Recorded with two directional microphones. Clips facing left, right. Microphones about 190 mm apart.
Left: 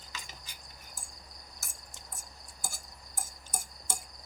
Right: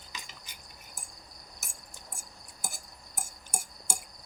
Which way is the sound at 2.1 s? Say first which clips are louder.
Right 1 dB; 20° right (ahead or behind).